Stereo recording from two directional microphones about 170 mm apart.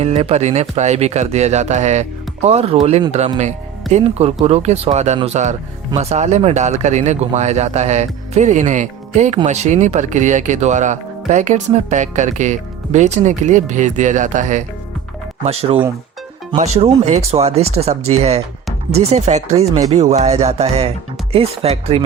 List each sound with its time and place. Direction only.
0.0 s speech: 35° right (ahead or behind)
15.4 s speech: 35° right (ahead or behind)